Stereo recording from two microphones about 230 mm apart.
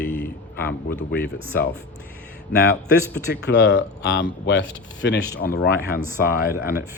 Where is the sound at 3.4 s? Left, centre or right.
Left.